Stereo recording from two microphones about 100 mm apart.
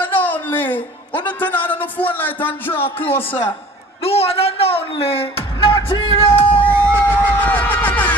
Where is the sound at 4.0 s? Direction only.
75° left (ahead or behind); by 6.1 s 60° left (ahead or behind).